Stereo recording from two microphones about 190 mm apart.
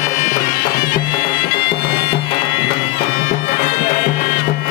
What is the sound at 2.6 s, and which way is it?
Bagpipes, 70° left (ahead or behind).